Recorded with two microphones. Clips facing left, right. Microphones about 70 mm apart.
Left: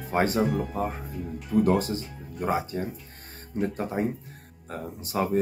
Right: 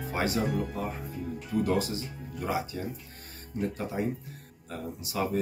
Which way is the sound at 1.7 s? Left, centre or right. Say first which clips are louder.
Left 4 dB; left.